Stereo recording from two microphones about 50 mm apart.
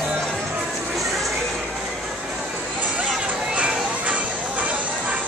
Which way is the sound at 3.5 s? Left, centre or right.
Right.